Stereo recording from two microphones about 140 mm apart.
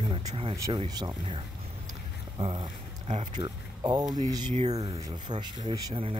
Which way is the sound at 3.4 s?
30° right (ahead or behind).